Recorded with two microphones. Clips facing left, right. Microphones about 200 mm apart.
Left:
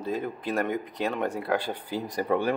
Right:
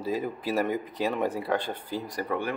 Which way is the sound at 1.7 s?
15° left (ahead or behind).